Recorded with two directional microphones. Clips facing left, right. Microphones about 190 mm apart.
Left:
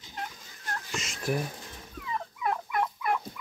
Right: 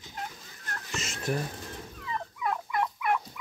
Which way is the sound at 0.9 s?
10° left (ahead or behind).